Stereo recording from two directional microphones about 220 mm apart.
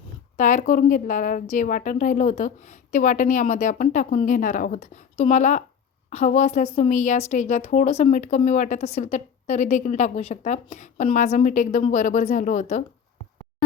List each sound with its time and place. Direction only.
0.3 s a woman's voice: 35° left (ahead or behind)